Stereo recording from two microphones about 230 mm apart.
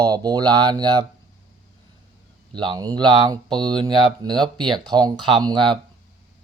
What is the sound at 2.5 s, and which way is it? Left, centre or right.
Speech, centre.